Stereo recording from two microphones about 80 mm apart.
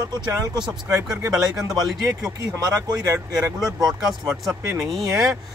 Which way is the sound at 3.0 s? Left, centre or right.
Right.